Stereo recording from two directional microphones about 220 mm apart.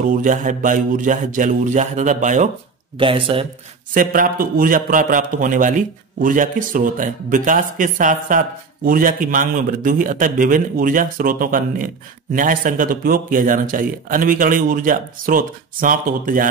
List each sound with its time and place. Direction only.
0.1 s a man's voice: 35° right (ahead or behind)
3.0 s speech: 25° right (ahead or behind)
3.9 s a man's voice: 40° right (ahead or behind)